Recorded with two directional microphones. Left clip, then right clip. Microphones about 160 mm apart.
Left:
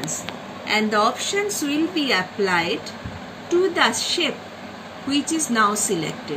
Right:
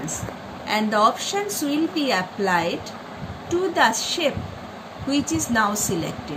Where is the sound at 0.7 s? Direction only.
20° right (ahead or behind).